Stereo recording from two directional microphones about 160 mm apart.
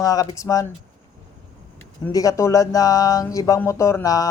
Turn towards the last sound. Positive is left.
turn(degrees=20)  # may be behind; listen again after turning